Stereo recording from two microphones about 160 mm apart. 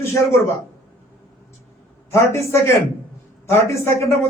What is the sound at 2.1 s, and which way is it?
A man's voice, 15° left (ahead or behind).